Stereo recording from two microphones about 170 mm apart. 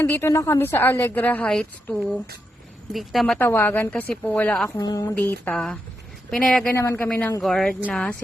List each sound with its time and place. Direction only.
0.0 s a woman's voice: 15° left (ahead or behind)
3.3 s a woman's voice: 10° left (ahead or behind)
4.8 s speech: 20° left (ahead or behind)
5.1 s speech: 10° left (ahead or behind)
6.7 s a woman's voice: 15° left (ahead or behind)